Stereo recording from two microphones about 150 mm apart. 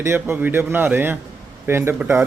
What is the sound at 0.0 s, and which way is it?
A man's voice, 15° right (ahead or behind).